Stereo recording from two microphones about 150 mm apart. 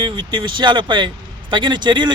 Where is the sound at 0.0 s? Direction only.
30° right (ahead or behind).